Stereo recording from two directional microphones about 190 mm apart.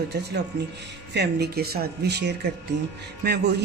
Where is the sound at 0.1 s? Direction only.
60° right (ahead or behind).